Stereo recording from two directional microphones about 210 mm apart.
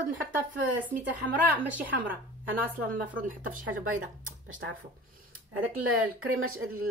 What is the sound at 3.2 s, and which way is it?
Speech, 40° right (ahead or behind).